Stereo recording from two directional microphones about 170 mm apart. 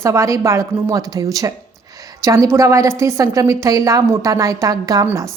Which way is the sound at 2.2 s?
20° right (ahead or behind).